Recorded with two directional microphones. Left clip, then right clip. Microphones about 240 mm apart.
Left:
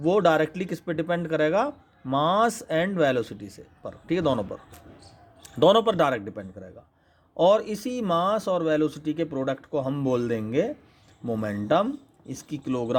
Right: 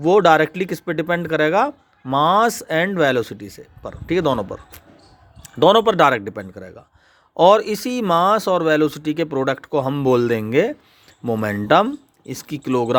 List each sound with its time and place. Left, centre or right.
0.0 s speech: right